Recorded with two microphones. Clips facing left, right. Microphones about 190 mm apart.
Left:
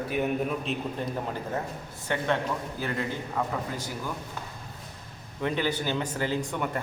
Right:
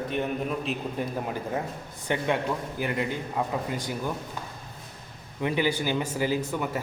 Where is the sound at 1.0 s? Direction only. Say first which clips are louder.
Right 1 dB; 10° right (ahead or behind).